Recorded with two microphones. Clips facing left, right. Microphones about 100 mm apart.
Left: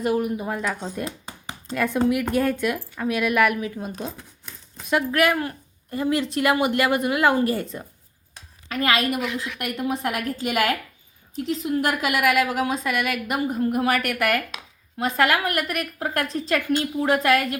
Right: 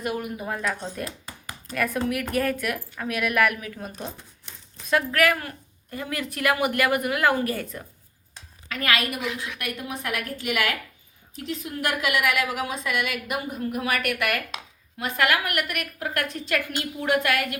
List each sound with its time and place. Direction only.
0.0 s a woman's voice: 30° left (ahead or behind)
0.4 s a woman's voice: 15° left (ahead or behind)
4.9 s a woman's voice: 20° left (ahead or behind)